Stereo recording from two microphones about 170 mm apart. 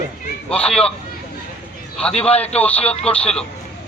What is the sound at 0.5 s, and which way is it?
Speech, 5° left (ahead or behind).